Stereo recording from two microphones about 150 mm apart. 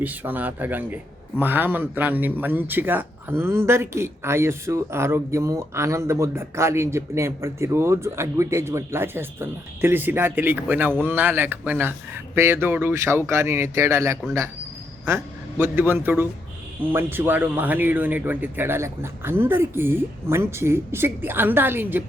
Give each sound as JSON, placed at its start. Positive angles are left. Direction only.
{"t": 0.0, "sound": "a man's voice", "side_deg": -10}